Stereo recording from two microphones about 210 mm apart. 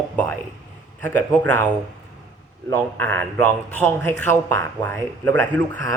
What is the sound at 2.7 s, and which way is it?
A man's voice, 10° left (ahead or behind).